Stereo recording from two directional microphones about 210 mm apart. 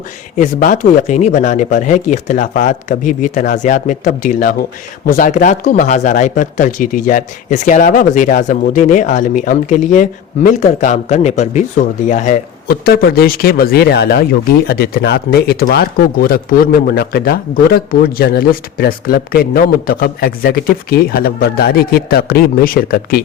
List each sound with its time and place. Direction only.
0.3 s speech: 40° left (ahead or behind)